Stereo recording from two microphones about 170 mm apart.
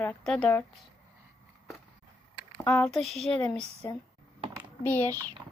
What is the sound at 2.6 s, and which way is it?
Speech, 5° left (ahead or behind).